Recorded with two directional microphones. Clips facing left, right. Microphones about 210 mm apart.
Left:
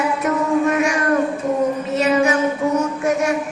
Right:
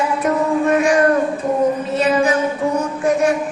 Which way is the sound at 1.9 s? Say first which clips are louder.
Left 1 dB; 35° right (ahead or behind).